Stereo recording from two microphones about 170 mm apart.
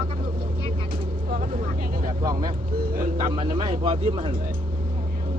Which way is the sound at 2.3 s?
25° right (ahead or behind).